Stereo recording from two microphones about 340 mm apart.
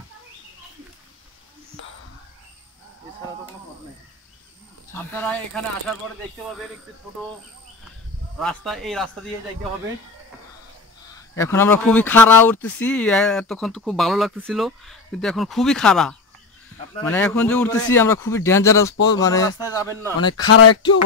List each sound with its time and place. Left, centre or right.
4.9 s speech: centre
8.4 s speech: centre
11.3 s a man's voice: centre
20.3 s speech: left